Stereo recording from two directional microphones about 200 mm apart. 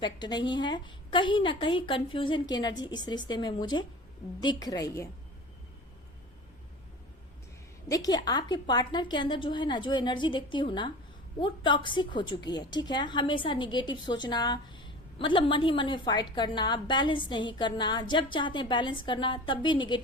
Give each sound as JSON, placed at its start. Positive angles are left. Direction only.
{"t": 0.0, "sound": "a woman's voice", "side_deg": 20}
{"t": 7.9, "sound": "a woman's voice", "side_deg": 20}